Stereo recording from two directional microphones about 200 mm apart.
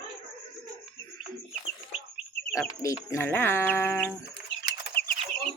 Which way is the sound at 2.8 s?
15° left (ahead or behind).